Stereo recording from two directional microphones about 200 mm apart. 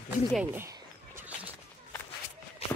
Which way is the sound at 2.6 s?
30° left (ahead or behind).